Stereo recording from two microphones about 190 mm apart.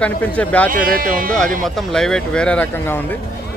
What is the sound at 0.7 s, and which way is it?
Speech, 45° right (ahead or behind).